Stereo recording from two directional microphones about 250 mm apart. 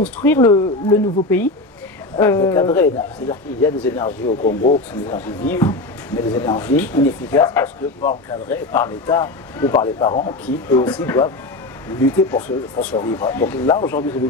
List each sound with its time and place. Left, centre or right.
0.0 s speech: centre
4.3 s speech: left
5.0 s speech: centre
10.4 s speech: centre